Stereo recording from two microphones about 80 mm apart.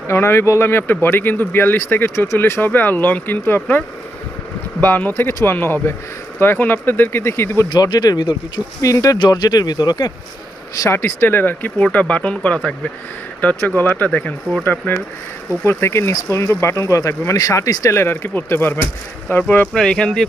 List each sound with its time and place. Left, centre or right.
0.1 s speech: left
7.7 s speech: left
8.8 s speech: left
9.3 s speech: left
10.8 s speech: left
18.0 s speech: left
19.7 s speech: centre